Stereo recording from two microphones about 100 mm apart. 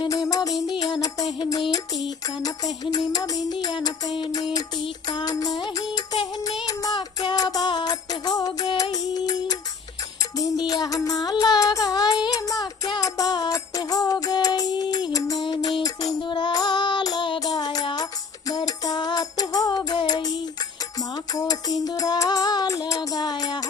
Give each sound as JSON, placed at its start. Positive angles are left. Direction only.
{"t": 0.1, "sound": "music", "side_deg": 35}
{"t": 2.8, "sound": "music", "side_deg": 40}
{"t": 6.9, "sound": "music", "side_deg": 50}
{"t": 10.7, "sound": "music", "side_deg": 35}
{"t": 15.4, "sound": "music", "side_deg": 50}
{"t": 21.3, "sound": "music", "side_deg": 40}